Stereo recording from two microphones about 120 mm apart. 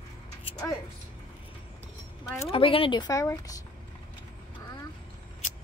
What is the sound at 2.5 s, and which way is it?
Speech, 50° left (ahead or behind).